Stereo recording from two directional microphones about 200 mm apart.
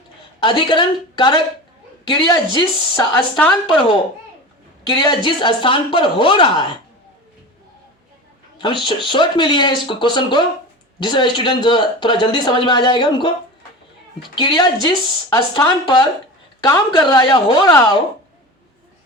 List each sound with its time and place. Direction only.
0.3 s speech: 25° left (ahead or behind)
3.3 s a woman's voice: 5° left (ahead or behind)
4.9 s speech: 20° left (ahead or behind)
8.5 s a man's voice: 25° left (ahead or behind)